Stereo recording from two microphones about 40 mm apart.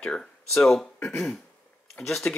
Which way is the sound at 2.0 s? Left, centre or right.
Left.